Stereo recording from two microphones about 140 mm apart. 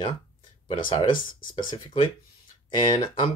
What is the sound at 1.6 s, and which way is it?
Speech, 30° left (ahead or behind).